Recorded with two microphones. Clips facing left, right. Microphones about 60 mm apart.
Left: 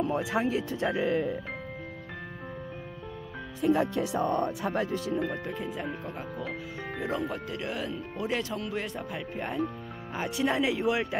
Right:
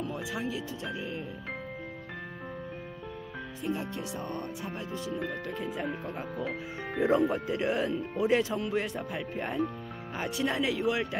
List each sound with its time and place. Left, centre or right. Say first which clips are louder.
0.1 s speech: left 7 dB; left
3.6 s speech: left 9 dB; left
5.2 s speech: left 2 dB; centre
7.5 s speech: right 5 dB; centre